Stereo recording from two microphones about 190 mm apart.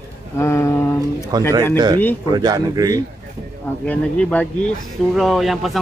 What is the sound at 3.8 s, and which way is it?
Speech, 5° left (ahead or behind).